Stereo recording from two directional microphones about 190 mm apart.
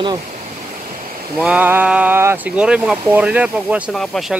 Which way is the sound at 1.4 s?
10° right (ahead or behind).